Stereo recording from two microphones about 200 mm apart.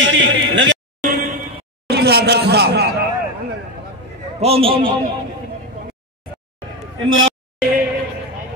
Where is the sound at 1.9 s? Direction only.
55° right (ahead or behind).